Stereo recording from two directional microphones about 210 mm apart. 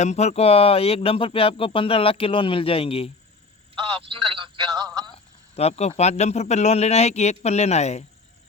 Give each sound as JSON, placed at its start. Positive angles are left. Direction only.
{"t": 0.0, "sound": "speech", "side_deg": 30}
{"t": 4.1, "sound": "speech", "side_deg": -25}
{"t": 5.1, "sound": "snake", "side_deg": 30}
{"t": 6.0, "sound": "a man's voice", "side_deg": 30}